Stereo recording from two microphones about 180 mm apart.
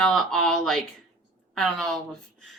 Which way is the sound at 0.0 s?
Centre (ahead or behind).